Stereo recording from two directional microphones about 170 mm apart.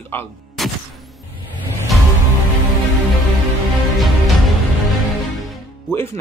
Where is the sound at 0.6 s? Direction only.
Centre (ahead or behind).